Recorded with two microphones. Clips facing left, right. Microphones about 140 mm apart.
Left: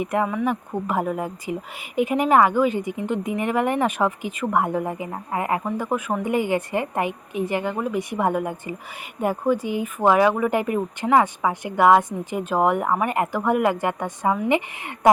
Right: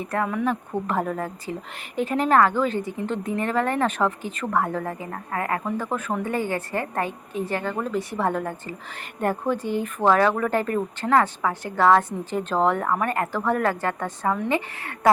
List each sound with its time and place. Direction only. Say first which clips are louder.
0.0 s speech: left 2 dB; 15° left (ahead or behind)